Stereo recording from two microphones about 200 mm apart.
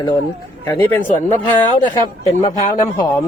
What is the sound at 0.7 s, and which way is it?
Speech, 10° left (ahead or behind).